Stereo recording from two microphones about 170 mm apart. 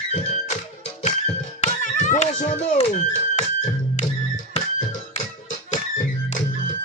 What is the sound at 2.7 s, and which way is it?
Speech, 45° left (ahead or behind).